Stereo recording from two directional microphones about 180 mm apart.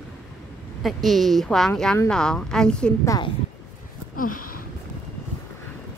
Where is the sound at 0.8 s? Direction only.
Centre (ahead or behind).